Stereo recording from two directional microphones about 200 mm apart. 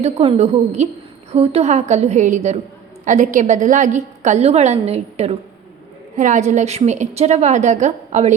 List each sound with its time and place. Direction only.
0.0 s a woman's voice: 30° right (ahead or behind)